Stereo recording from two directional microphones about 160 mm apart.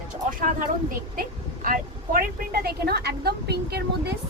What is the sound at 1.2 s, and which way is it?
Speech, 60° right (ahead or behind).